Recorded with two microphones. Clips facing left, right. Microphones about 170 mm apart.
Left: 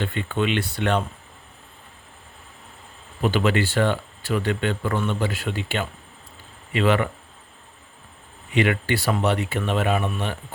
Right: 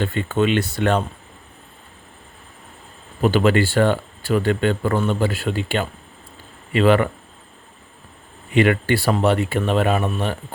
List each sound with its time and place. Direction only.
0.0 s speech: 45° right (ahead or behind)
3.2 s speech: 40° right (ahead or behind)
8.5 s speech: 45° right (ahead or behind)